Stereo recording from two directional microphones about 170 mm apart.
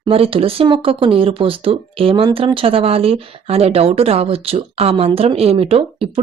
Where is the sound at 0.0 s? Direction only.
35° right (ahead or behind).